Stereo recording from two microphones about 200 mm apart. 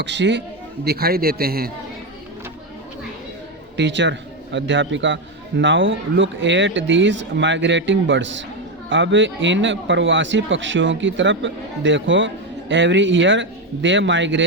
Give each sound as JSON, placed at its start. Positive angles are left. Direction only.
{"t": 0.0, "sound": "a man's voice", "side_deg": -60}
{"t": 0.9, "sound": "a man's voice", "side_deg": -50}
{"t": 3.8, "sound": "a man's voice", "side_deg": -60}